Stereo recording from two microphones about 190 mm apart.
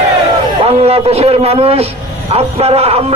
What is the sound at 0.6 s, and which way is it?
Speech, 30° right (ahead or behind).